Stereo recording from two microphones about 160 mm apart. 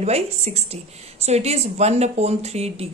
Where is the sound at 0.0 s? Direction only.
40° right (ahead or behind).